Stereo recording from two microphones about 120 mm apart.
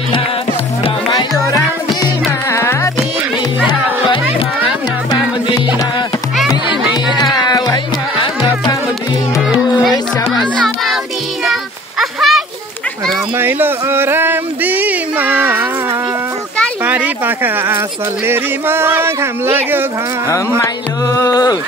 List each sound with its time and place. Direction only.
2.5 s music: 25° left (ahead or behind)
4.6 s music: 35° left (ahead or behind)
7.3 s music: 30° left (ahead or behind)
9.4 s music: 5° right (ahead or behind)
12.0 s splash: centre (ahead or behind)
13.4 s a sound: 15° right (ahead or behind)
16.8 s speech: 15° right (ahead or behind)
20.6 s music: 30° left (ahead or behind)